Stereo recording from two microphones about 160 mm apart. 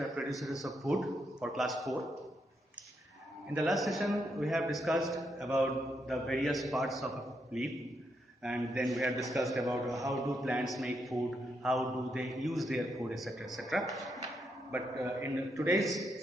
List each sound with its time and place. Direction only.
0.2 s a man's voice: 5° right (ahead or behind)
3.5 s a man's voice: centre (ahead or behind)
15.0 s a man's voice: 15° right (ahead or behind)
15.7 s a man's voice: centre (ahead or behind)